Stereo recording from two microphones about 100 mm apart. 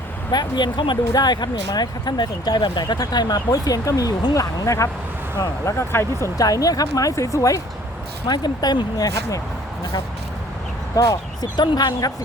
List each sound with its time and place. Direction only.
0.3 s speech: 45° left (ahead or behind)
8.3 s speech: 45° left (ahead or behind)
10.9 s speech: 35° left (ahead or behind)